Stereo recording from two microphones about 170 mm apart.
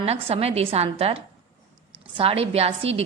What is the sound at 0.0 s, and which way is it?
A woman's voice, 35° right (ahead or behind).